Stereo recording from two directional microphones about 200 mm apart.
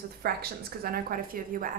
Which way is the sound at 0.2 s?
50° right (ahead or behind).